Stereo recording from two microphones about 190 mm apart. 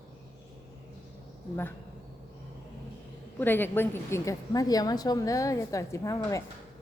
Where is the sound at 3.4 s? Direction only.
10° left (ahead or behind).